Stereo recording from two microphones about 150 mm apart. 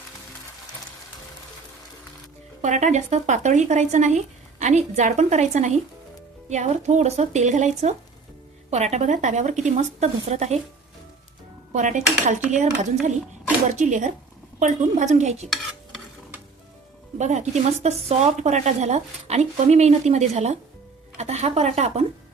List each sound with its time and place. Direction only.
2.6 s speech: 50° right (ahead or behind)
11.7 s dishes: 55° right (ahead or behind)
12.5 s speech: 55° right (ahead or behind)
13.7 s dishes: 55° right (ahead or behind)
14.6 s speech: 55° right (ahead or behind)
17.2 s speech: 50° right (ahead or behind)